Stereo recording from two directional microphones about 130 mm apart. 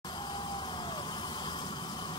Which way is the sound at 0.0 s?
35° left (ahead or behind).